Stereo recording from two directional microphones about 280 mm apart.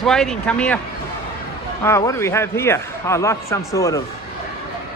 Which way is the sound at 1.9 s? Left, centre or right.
Centre.